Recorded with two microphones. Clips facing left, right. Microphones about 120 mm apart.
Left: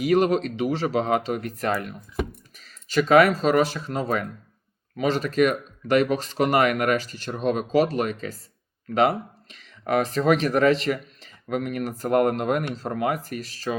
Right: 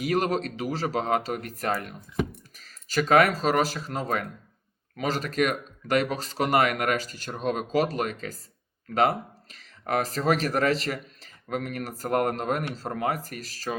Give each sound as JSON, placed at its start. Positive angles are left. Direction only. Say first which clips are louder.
{"t": 0.0, "sound": "speech", "louder": "left 5 dB", "side_deg": -40}
{"t": 2.6, "sound": "a sound", "louder": "left 4 dB", "side_deg": -40}
{"t": 3.3, "sound": "speech", "louder": "left 4 dB", "side_deg": -40}